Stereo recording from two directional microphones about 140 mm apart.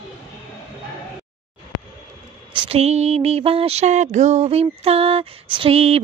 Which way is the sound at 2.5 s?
40° right (ahead or behind).